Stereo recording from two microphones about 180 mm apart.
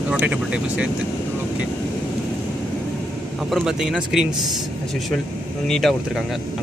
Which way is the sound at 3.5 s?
5° right (ahead or behind).